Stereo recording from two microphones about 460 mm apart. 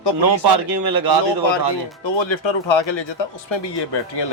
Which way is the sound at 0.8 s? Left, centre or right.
Right.